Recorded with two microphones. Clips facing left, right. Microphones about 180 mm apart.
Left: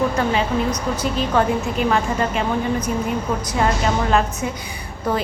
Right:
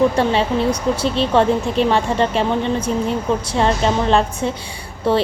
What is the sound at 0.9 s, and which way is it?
A woman's voice, 30° right (ahead or behind).